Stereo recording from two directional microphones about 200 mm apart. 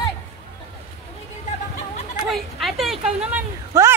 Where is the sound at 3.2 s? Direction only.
10° right (ahead or behind).